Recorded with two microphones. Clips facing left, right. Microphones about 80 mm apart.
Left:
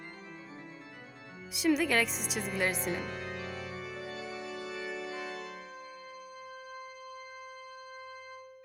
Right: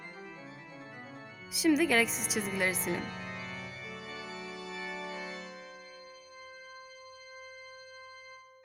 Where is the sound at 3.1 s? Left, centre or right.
Left.